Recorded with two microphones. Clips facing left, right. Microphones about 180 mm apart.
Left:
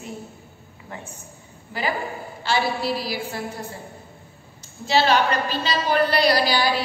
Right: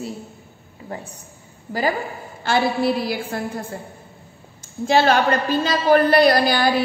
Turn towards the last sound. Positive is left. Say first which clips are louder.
# right 4 dB
turn(degrees=-50)  # may be behind; listen again after turning